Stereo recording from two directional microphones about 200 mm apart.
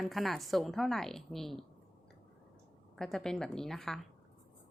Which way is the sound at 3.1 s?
5° left (ahead or behind).